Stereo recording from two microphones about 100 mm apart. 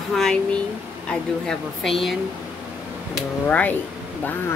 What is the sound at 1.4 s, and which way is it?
Speech, centre (ahead or behind).